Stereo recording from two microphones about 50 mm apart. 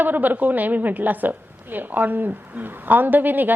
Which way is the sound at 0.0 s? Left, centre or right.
Right.